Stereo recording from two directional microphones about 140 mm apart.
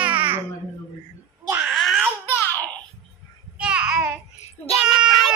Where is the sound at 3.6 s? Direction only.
5° right (ahead or behind).